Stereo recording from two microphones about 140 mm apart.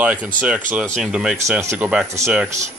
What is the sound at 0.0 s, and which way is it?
Speech, 10° right (ahead or behind).